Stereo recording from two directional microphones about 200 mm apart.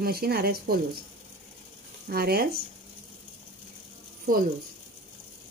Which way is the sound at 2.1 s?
50° right (ahead or behind).